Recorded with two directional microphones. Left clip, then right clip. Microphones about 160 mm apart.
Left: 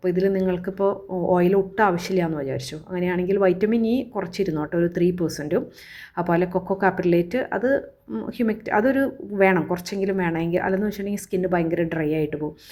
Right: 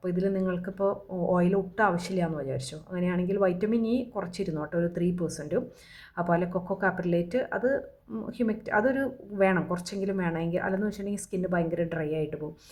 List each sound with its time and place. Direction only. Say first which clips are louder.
0.0 s speech: left 8 dB; 15° left (ahead or behind)